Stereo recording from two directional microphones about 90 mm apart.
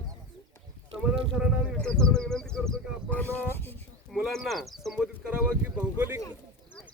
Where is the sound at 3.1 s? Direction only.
20° left (ahead or behind).